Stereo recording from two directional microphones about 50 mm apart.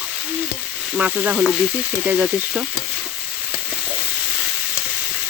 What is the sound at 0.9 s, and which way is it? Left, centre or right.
Frying, right.